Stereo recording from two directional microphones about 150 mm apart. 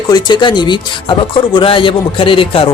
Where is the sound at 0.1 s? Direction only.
30° left (ahead or behind).